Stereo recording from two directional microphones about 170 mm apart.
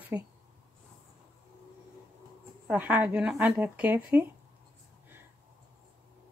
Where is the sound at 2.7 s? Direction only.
10° right (ahead or behind).